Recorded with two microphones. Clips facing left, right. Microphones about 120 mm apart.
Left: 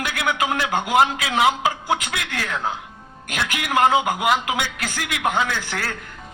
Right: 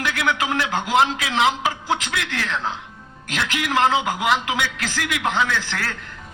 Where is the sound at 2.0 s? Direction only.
45° left (ahead or behind).